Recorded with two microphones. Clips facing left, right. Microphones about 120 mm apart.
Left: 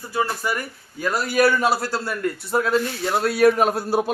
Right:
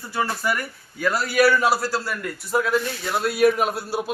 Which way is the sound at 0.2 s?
20° left (ahead or behind).